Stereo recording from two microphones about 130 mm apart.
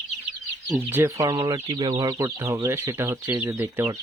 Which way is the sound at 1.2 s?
30° right (ahead or behind).